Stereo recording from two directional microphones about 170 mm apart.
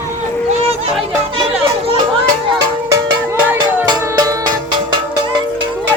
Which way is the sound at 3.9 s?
25° right (ahead or behind).